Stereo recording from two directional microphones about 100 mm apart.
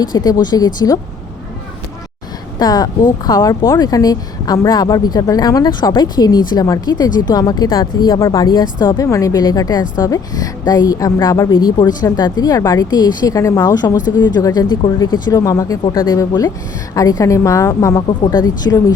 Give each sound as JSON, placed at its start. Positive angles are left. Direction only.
{"t": 0.0, "sound": "speech", "side_deg": 45}
{"t": 2.6, "sound": "speech", "side_deg": 40}
{"t": 8.2, "sound": "speech", "side_deg": 30}
{"t": 11.5, "sound": "speech", "side_deg": 45}
{"t": 13.9, "sound": "speech", "side_deg": 45}
{"t": 18.3, "sound": "speech", "side_deg": 45}